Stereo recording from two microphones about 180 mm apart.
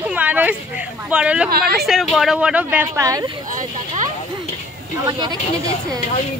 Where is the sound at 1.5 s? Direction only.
60° right (ahead or behind).